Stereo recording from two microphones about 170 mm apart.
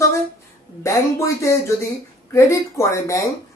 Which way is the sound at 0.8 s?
15° left (ahead or behind).